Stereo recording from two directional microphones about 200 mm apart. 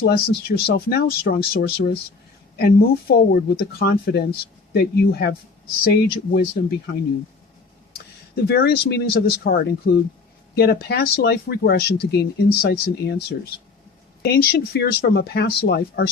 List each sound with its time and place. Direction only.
0.0 s speech: 50° left (ahead or behind)
8.4 s speech: 55° left (ahead or behind)
14.2 s speech: 55° left (ahead or behind)